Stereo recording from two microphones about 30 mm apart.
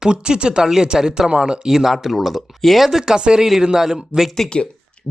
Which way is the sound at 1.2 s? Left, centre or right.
Right.